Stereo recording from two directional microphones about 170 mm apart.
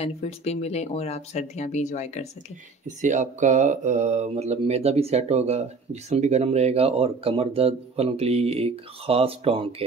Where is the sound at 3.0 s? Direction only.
45° right (ahead or behind).